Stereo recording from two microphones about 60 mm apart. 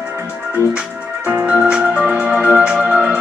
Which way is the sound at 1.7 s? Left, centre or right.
Centre.